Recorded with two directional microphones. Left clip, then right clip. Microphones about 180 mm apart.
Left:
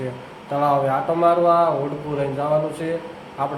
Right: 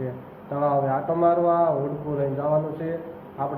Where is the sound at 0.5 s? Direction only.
15° left (ahead or behind).